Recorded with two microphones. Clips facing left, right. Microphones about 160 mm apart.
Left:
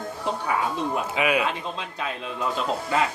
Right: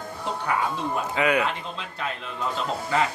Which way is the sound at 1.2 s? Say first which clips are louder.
Right 1 dB; 15° left (ahead or behind).